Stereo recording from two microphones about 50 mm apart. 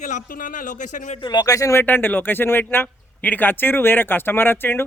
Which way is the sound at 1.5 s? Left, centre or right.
Left.